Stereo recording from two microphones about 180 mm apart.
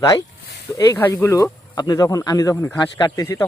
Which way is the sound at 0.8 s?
15° left (ahead or behind).